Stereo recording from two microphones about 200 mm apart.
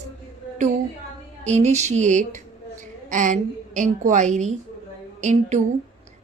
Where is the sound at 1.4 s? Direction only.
35° right (ahead or behind).